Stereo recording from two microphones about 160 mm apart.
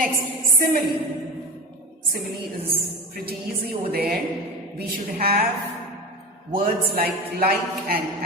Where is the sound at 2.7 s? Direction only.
75° right (ahead or behind).